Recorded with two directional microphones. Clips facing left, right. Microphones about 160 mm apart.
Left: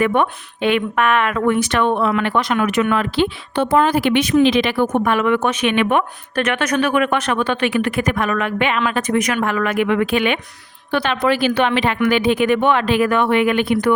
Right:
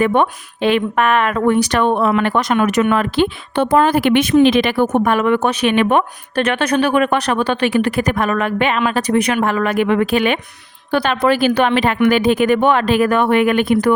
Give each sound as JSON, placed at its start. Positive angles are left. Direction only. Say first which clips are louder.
{"t": 0.0, "sound": "a woman's voice", "louder": "right 2 dB", "side_deg": -30}